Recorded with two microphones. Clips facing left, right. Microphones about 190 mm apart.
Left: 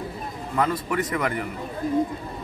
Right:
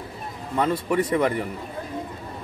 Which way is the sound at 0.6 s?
30° right (ahead or behind).